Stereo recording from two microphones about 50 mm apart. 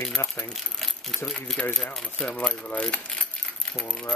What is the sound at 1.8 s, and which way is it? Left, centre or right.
Speech, centre.